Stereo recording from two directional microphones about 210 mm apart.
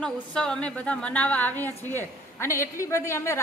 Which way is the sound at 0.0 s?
5° left (ahead or behind).